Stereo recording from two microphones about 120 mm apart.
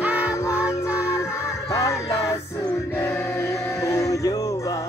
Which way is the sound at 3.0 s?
20° left (ahead or behind).